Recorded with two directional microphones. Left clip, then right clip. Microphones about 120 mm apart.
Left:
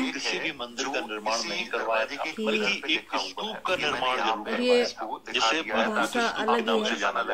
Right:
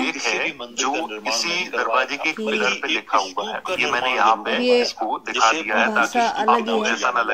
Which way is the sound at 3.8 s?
50° right (ahead or behind).